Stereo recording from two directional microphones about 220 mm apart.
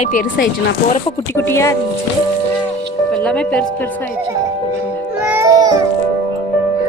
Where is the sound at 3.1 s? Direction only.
5° left (ahead or behind).